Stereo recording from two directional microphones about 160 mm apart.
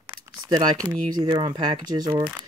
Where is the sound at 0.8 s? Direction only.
25° right (ahead or behind).